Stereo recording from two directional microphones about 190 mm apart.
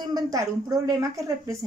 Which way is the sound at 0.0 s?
20° right (ahead or behind).